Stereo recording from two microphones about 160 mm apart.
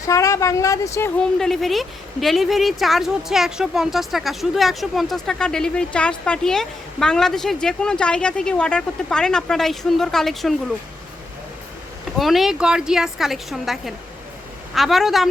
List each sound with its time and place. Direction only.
0.0 s speech: 20° left (ahead or behind)
1.2 s a woman's voice: centre (ahead or behind)
12.2 s a woman's voice: centre (ahead or behind)